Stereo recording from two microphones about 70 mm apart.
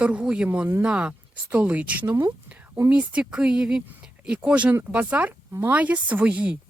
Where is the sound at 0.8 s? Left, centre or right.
Centre.